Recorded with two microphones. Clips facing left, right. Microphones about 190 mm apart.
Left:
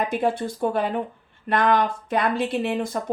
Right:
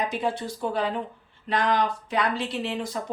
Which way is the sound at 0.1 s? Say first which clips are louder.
Left 5 dB; 50° left (ahead or behind).